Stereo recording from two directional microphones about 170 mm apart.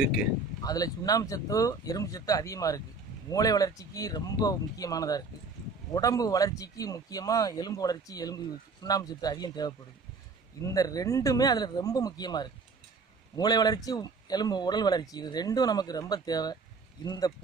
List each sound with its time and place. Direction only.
0.0 s speech: 5° right (ahead or behind)
0.7 s speech: 20° left (ahead or behind)